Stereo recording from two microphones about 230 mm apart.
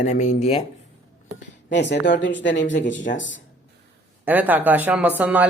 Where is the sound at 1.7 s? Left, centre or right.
Left.